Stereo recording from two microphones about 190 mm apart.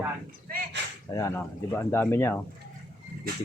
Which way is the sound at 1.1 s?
15° left (ahead or behind).